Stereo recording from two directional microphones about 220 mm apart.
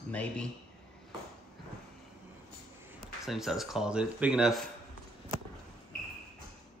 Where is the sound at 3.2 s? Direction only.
Centre (ahead or behind).